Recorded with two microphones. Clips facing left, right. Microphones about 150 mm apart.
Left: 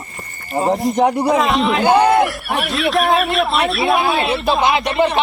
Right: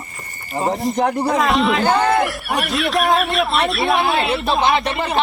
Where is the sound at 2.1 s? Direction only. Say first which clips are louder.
Left 3 dB; centre (ahead or behind).